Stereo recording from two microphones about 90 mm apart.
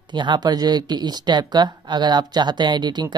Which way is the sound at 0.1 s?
55° right (ahead or behind).